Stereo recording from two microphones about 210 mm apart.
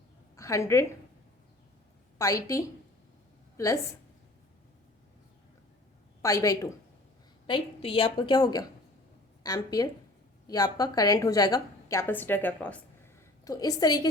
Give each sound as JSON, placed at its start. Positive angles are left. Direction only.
{"t": 0.3, "sound": "a woman's voice", "side_deg": 15}
{"t": 2.1, "sound": "a woman's voice", "side_deg": 15}
{"t": 6.2, "sound": "a woman's voice", "side_deg": 15}